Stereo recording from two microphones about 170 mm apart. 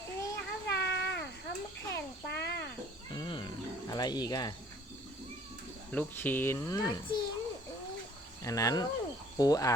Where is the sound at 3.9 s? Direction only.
25° left (ahead or behind).